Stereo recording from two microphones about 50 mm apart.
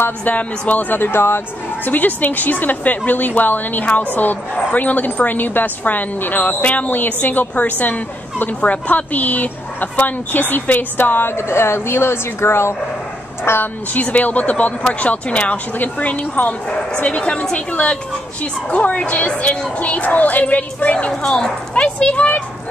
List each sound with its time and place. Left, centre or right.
0.2 s a woman's voice: left
1.9 s a woman's voice: left
11.3 s a woman's voice: left
13.9 s a woman's voice: left
16.6 s a woman's voice: centre
21.1 s speech: centre